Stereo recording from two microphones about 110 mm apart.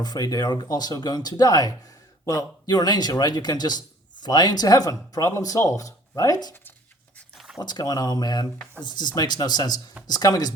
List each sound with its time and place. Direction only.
0.0 s speech: 35° left (ahead or behind)
7.3 s a sound: centre (ahead or behind)
7.6 s speech: 40° left (ahead or behind)